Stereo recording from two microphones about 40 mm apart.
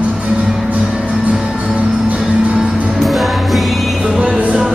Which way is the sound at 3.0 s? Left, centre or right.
Centre.